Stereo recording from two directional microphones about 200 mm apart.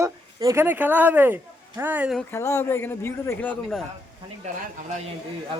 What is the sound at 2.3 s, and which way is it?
A man's voice, 15° left (ahead or behind).